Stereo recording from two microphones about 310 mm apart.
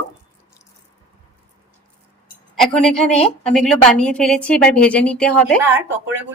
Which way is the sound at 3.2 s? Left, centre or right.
Centre.